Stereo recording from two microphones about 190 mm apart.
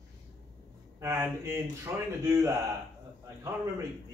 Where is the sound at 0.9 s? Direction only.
15° right (ahead or behind).